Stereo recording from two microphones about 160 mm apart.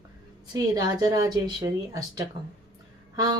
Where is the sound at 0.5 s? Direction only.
25° right (ahead or behind).